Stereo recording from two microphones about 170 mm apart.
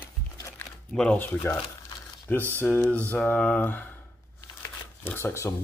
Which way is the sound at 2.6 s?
10° left (ahead or behind).